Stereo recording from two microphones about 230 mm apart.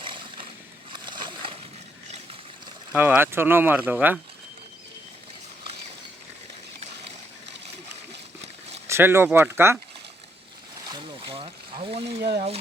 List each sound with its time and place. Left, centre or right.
0.0 s a sound: right
2.9 s speech: centre
8.9 s speech: centre
10.9 s speech: right